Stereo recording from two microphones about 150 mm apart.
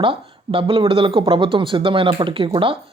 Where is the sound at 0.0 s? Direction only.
35° right (ahead or behind).